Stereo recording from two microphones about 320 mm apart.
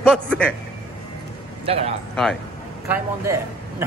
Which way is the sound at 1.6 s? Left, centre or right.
Centre.